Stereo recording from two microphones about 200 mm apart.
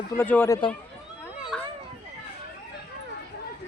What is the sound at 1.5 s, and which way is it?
Children playing, centre (ahead or behind).